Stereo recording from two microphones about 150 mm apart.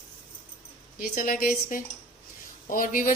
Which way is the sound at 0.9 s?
70° left (ahead or behind).